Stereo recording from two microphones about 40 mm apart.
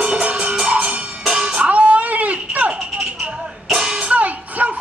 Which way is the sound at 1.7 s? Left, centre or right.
Right.